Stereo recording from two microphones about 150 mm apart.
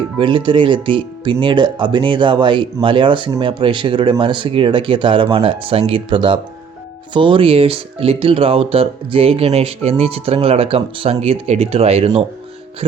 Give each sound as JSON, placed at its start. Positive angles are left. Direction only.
{"t": 0.2, "sound": "speech", "side_deg": -35}